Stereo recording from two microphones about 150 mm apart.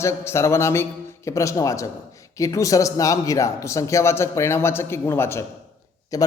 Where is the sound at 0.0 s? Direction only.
20° left (ahead or behind).